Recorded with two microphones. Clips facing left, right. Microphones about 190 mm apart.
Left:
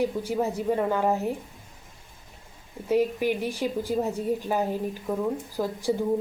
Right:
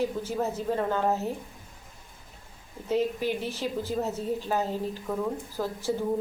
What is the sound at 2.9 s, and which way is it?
A woman's voice, 10° left (ahead or behind).